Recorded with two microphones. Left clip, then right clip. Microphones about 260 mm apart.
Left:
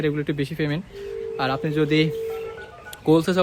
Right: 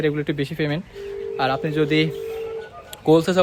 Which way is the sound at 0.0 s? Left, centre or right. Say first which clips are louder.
Right 2 dB; centre.